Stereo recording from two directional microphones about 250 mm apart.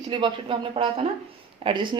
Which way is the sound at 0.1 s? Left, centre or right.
Centre.